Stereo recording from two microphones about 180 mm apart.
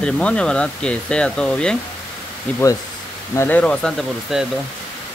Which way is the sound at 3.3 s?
10° left (ahead or behind).